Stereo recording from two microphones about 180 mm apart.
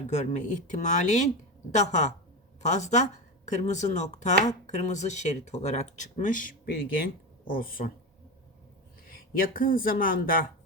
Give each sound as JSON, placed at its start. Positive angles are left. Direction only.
{"t": 0.1, "sound": "speech", "side_deg": 40}
{"t": 9.0, "sound": "speech", "side_deg": 55}